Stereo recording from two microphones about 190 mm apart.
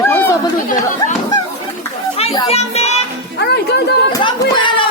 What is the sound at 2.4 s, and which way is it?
Music, 35° left (ahead or behind).